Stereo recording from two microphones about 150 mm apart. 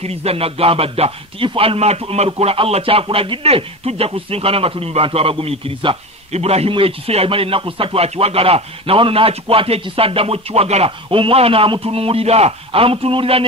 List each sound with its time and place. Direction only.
0.0 s speech: 45° right (ahead or behind)